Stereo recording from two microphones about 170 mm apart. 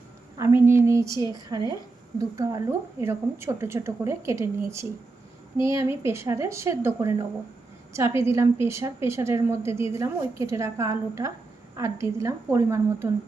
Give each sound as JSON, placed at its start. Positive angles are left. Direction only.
{"t": 0.3, "sound": "a woman's voice", "side_deg": -15}
{"t": 5.5, "sound": "a woman's voice", "side_deg": -15}